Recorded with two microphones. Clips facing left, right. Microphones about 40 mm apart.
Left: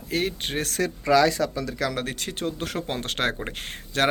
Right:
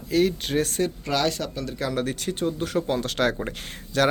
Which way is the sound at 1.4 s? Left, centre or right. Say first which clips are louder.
Left 3 dB; left.